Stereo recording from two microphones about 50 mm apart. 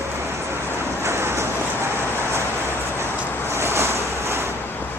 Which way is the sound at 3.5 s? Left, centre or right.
Right.